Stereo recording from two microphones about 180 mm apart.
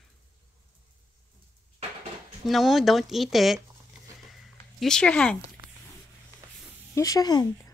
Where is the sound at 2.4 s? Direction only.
Centre (ahead or behind).